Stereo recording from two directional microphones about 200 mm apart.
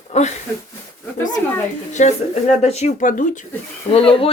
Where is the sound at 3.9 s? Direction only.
30° left (ahead or behind).